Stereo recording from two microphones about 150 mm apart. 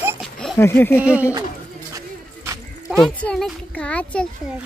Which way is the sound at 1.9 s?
20° right (ahead or behind).